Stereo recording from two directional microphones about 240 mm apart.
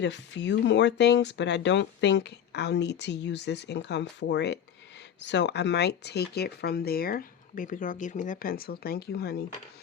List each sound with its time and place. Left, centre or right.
0.0 s speech: left